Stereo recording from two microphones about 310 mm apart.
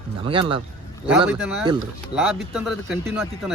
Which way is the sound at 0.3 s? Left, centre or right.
Centre.